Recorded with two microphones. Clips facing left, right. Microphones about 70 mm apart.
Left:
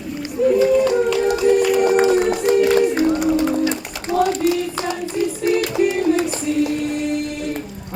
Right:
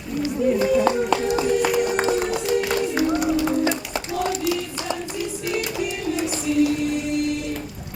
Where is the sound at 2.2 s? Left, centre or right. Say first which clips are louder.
Left 6 dB; left.